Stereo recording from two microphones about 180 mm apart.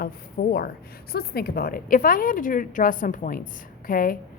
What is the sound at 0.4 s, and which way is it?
A woman's voice, 60° left (ahead or behind).